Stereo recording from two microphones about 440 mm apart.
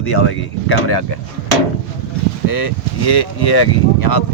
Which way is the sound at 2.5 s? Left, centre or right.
Left.